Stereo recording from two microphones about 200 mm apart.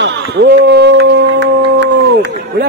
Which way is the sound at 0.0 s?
55° right (ahead or behind).